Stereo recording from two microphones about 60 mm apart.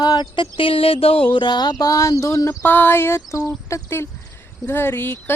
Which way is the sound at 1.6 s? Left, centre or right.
Left.